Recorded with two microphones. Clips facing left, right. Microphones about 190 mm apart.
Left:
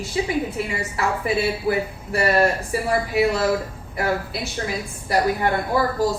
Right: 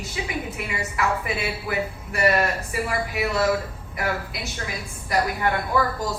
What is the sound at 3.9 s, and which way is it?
A woman's voice, 30° left (ahead or behind).